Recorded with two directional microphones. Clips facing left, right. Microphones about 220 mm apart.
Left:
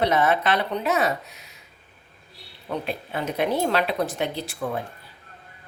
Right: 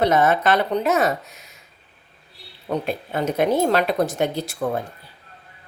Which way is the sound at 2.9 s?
45° right (ahead or behind).